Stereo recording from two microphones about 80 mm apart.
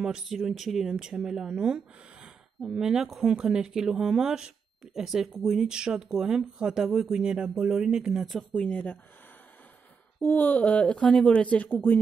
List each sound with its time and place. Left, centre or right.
0.0 s speech: centre
8.4 s speech: centre
10.2 s speech: left
11.1 s speech: centre
11.5 s speech: left